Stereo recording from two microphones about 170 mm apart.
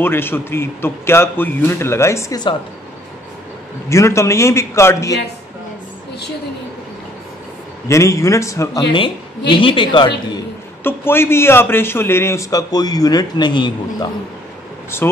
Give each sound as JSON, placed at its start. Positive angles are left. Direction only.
{"t": 0.0, "sound": "a man's voice", "side_deg": 15}
{"t": 3.9, "sound": "a man's voice", "side_deg": 15}
{"t": 7.9, "sound": "a man's voice", "side_deg": 15}
{"t": 9.5, "sound": "a man's voice", "side_deg": 30}
{"t": 10.8, "sound": "a man's voice", "side_deg": 15}
{"t": 14.9, "sound": "a man's voice", "side_deg": 15}